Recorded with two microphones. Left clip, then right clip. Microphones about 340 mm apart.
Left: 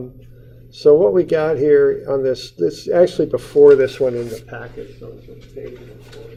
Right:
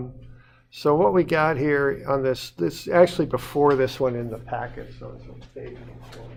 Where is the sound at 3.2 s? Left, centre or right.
Right.